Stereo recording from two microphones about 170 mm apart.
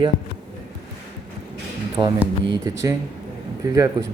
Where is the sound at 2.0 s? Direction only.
20° right (ahead or behind).